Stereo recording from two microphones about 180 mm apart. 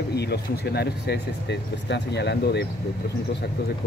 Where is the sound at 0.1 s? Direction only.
65° left (ahead or behind).